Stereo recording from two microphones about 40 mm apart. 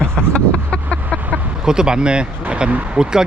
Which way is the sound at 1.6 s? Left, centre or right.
Centre.